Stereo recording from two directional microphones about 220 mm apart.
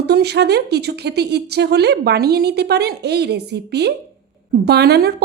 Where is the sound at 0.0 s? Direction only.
50° right (ahead or behind).